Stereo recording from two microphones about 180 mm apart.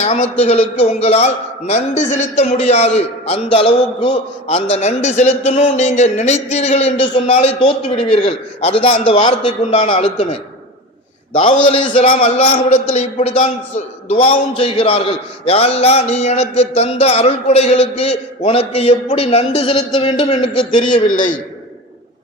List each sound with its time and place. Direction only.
0.0 s a man's voice: 35° left (ahead or behind)
20.9 s a man's voice: 45° left (ahead or behind)